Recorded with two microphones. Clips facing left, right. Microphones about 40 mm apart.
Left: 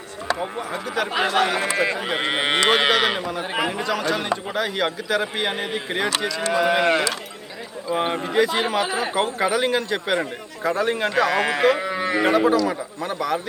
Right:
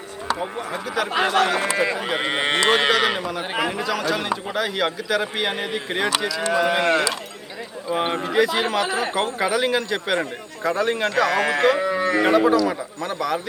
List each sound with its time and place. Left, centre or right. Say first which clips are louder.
0.3 s a man's voice: even; centre
8.1 s a man's voice: right 1 dB; centre
11.9 s cattle: right 2 dB; left
12.2 s a man's voice: even; centre